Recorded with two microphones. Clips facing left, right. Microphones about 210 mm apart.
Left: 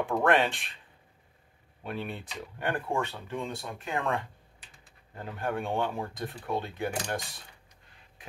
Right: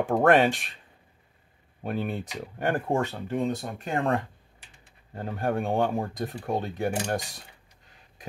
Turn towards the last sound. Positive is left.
turn(degrees=-40)  # may be behind; listen again after turning